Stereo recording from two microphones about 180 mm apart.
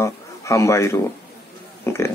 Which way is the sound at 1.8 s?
15° left (ahead or behind).